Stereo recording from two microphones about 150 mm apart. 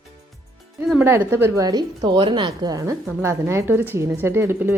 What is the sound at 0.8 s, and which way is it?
A woman's voice, 5° right (ahead or behind).